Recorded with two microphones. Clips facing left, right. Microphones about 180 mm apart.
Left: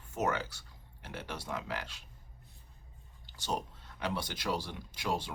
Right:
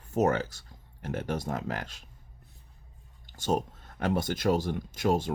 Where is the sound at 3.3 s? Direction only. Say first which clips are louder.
Right 8 dB; 45° right (ahead or behind).